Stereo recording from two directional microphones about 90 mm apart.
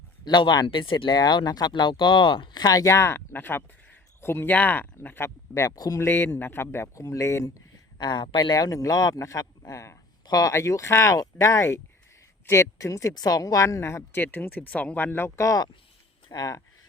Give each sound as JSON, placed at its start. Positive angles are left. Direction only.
{"t": 0.3, "sound": "speech", "side_deg": 55}
{"t": 5.7, "sound": "speech", "side_deg": 45}
{"t": 6.0, "sound": "speech", "side_deg": 25}
{"t": 7.9, "sound": "speech", "side_deg": 55}
{"t": 8.5, "sound": "speech", "side_deg": 40}
{"t": 15.4, "sound": "speech", "side_deg": 35}